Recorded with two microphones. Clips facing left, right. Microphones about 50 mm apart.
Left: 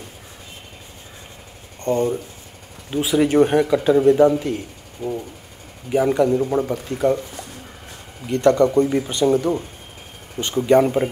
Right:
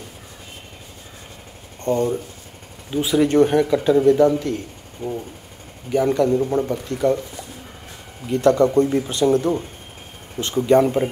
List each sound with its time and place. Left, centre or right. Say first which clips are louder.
1.8 s a man's voice: even; centre
5.0 s speech: left 1 dB; right
5.9 s a man's voice: left 1 dB; centre
8.7 s a man's voice: even; centre
10.6 s speech: even; centre